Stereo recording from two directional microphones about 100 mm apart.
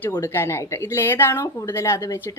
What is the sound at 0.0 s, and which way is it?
A woman's voice, 20° left (ahead or behind).